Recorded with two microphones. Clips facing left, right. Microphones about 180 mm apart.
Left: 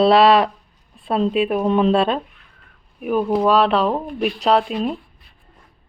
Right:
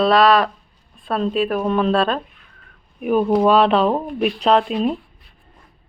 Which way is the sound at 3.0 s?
Centre (ahead or behind).